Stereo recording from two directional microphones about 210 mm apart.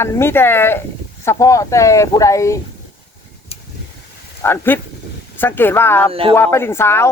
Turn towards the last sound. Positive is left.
turn(degrees=10)  # may be behind; listen again after turning